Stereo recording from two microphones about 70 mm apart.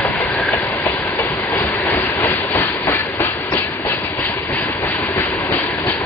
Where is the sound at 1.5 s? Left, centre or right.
Left.